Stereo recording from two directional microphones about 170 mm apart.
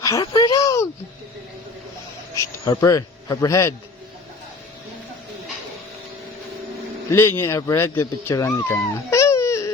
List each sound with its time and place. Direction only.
0.0 s a sound: 20° left (ahead or behind)
2.3 s speech: 20° left (ahead or behind)
7.1 s speech: 15° left (ahead or behind)